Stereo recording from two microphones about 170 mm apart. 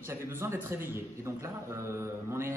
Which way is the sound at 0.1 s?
15° right (ahead or behind).